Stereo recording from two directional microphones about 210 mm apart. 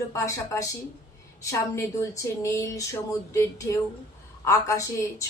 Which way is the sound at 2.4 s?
15° left (ahead or behind).